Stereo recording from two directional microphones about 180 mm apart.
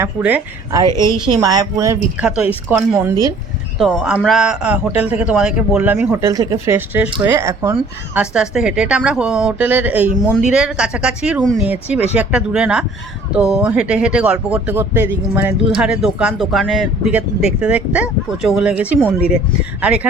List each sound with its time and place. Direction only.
0.0 s speech: 10° right (ahead or behind)
1.0 s speech: 20° right (ahead or behind)
3.8 s speech: centre (ahead or behind)